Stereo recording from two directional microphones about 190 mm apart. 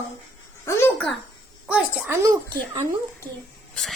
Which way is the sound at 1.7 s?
5° right (ahead or behind).